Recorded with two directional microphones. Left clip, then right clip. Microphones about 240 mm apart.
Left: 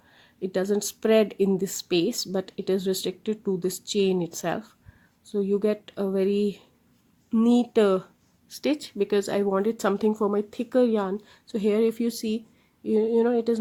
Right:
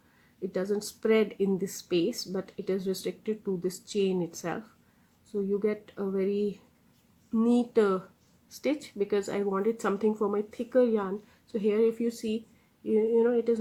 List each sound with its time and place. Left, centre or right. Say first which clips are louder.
0.5 s a woman's voice: left 5 dB; left